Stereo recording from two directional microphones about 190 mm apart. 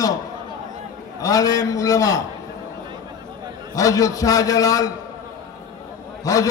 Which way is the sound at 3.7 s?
15° left (ahead or behind).